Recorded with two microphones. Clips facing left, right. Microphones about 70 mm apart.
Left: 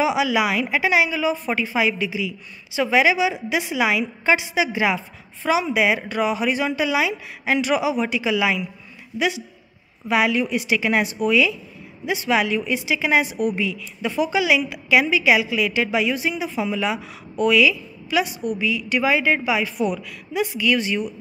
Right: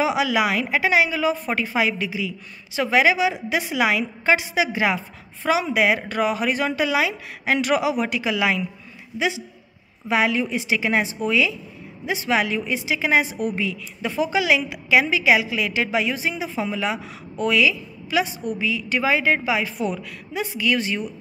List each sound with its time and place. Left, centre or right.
0.0 s a woman's voice: right
10.0 s a woman's voice: right